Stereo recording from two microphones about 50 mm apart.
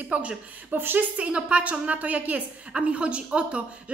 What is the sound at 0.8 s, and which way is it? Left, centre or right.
Speech, right.